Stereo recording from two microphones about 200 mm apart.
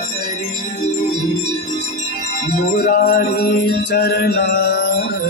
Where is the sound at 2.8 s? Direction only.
50° left (ahead or behind).